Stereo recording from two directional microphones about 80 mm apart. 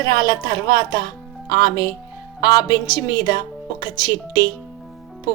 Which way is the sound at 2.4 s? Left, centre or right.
Left.